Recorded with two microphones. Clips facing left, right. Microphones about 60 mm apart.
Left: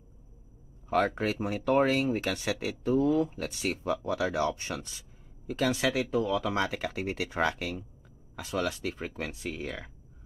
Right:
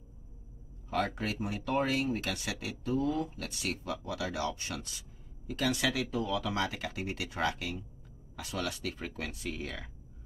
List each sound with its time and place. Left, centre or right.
0.8 s speech: centre
8.9 s speech: centre